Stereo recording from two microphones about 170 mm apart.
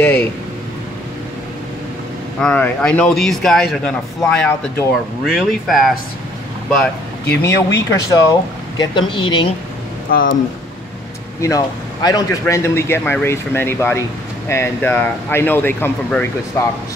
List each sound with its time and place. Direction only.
2.4 s a man's voice: 10° left (ahead or behind)
4.2 s a man's voice: 15° left (ahead or behind)
5.2 s a man's voice: centre (ahead or behind)
7.2 s speech: 15° left (ahead or behind)
10.1 s speech: 60° left (ahead or behind)
11.4 s a man's voice: 20° left (ahead or behind)